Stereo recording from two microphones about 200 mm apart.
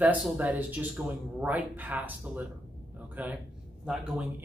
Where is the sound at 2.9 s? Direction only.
10° right (ahead or behind).